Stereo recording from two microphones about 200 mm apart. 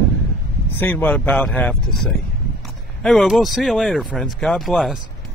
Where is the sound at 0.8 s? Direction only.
10° left (ahead or behind).